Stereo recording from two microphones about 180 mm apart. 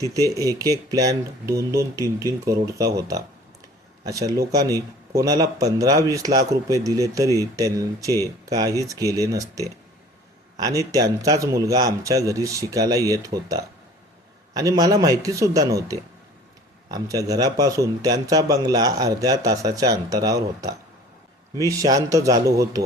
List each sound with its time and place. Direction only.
0.0 s a man's voice: 20° right (ahead or behind)